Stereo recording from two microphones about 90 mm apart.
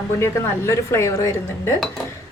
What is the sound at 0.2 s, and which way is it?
A woman's voice, 30° left (ahead or behind).